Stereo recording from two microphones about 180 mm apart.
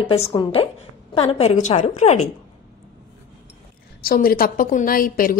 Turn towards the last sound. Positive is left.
turn(degrees=50)  # may be behind; listen again after turning